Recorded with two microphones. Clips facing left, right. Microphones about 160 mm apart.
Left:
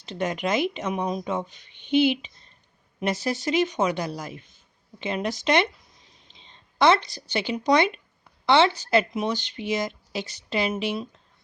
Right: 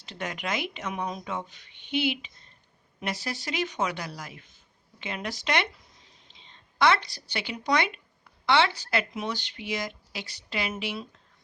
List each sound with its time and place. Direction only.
0.0 s speech: 25° left (ahead or behind)
6.7 s speech: 25° left (ahead or behind)